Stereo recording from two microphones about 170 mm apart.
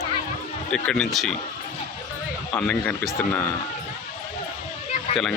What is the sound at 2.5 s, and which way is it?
Speech, 5° left (ahead or behind).